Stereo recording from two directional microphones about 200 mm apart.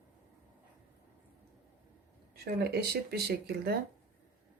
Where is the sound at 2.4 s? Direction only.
55° right (ahead or behind).